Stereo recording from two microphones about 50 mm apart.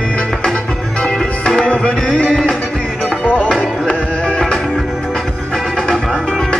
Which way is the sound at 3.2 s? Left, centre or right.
Left.